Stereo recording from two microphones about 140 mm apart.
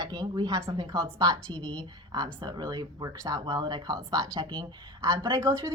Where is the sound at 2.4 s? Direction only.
30° right (ahead or behind).